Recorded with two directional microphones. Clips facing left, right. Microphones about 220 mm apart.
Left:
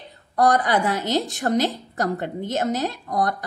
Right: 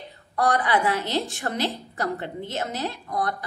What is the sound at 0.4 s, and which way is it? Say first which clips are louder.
A woman's voice: left 3 dB; 45° left (ahead or behind).